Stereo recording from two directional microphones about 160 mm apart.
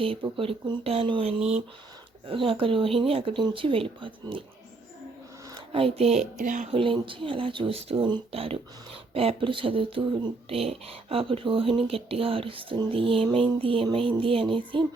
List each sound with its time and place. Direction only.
0.0 s speech: 35° right (ahead or behind)
5.7 s speech: 35° right (ahead or behind)
6.4 s speech: 55° right (ahead or behind)
6.7 s speech: 35° right (ahead or behind)